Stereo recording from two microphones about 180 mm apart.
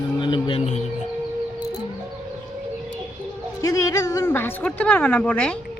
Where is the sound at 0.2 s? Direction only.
25° left (ahead or behind).